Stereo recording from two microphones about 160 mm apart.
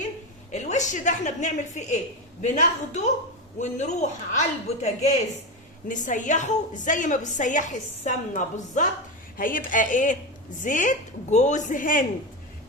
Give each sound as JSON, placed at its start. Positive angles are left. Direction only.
{"t": 0.5, "sound": "a woman's voice", "side_deg": 45}